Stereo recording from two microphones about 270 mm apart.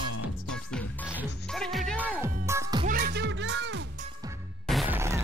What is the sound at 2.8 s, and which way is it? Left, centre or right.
Music, right.